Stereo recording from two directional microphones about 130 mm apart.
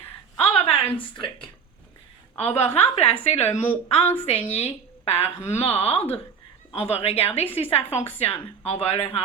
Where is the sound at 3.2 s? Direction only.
50° left (ahead or behind).